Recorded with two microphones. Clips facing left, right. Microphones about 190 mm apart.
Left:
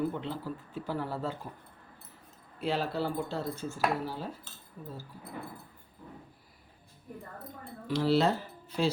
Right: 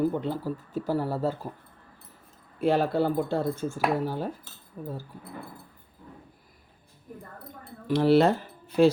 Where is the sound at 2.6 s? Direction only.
55° right (ahead or behind).